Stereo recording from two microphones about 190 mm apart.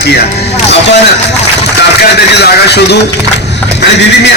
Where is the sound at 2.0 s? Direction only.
60° left (ahead or behind).